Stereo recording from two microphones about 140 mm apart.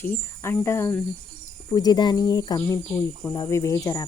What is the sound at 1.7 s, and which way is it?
Speech, 30° left (ahead or behind).